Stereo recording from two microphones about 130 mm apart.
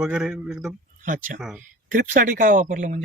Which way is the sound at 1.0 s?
90° right.